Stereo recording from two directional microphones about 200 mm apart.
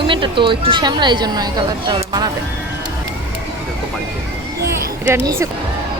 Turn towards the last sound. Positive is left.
turn(degrees=-15)  # may be behind; listen again after turning